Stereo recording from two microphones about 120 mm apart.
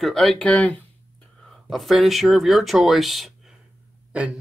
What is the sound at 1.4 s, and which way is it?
Speech, centre (ahead or behind).